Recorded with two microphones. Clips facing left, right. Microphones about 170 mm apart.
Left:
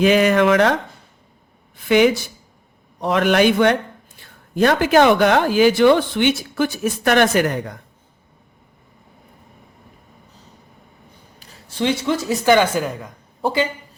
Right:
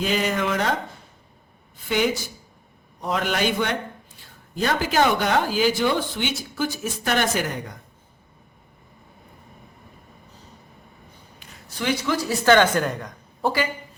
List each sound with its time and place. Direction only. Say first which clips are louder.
0.0 s speech: left 9 dB; 65° left (ahead or behind)
1.7 s speech: left 8 dB; 70° left (ahead or behind)
11.3 s speech: left 7 dB; 35° left (ahead or behind); by 13.1 s 5° left (ahead or behind)
13.4 s speech: left 3 dB; 20° left (ahead or behind)